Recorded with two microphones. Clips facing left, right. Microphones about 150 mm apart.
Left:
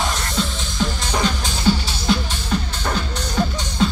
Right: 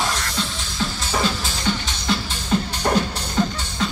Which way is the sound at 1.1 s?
5° right (ahead or behind).